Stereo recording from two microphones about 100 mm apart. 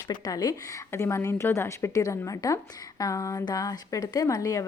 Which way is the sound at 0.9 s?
30° left (ahead or behind).